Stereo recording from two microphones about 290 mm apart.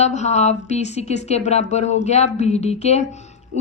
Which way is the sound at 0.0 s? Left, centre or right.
Left.